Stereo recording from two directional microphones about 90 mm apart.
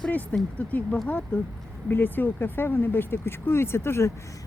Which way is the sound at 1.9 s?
20° left (ahead or behind).